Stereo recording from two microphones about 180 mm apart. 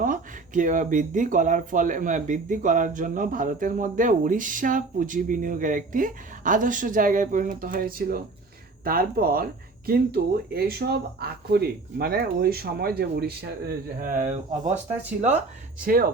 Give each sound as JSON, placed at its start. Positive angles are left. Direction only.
{"t": 0.0, "sound": "speech", "side_deg": -45}
{"t": 15.8, "sound": "speech", "side_deg": -55}